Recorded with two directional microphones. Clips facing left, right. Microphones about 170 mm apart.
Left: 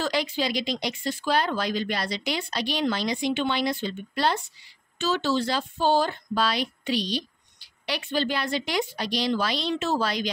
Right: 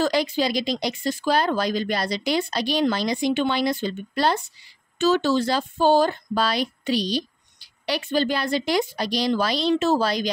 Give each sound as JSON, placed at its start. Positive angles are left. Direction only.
{"t": 0.0, "sound": "speech", "side_deg": -40}